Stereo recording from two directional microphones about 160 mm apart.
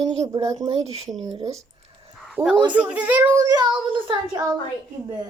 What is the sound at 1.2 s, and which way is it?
Speech, 25° right (ahead or behind).